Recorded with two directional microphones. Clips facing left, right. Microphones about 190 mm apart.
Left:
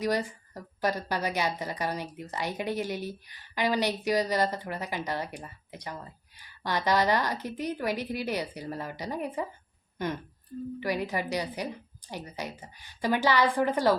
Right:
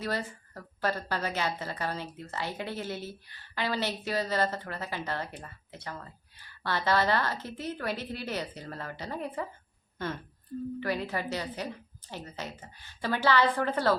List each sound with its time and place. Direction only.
0.0 s a woman's voice: 15° left (ahead or behind)